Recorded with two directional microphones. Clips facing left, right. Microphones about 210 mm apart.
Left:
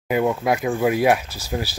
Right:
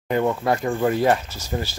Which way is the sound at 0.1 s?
10° left (ahead or behind).